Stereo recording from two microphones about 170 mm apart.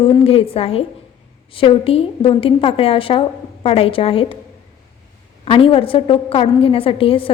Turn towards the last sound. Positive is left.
turn(degrees=30)  # may be behind; listen again after turning